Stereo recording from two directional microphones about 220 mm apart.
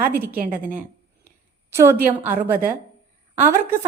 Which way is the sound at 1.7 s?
10° right (ahead or behind).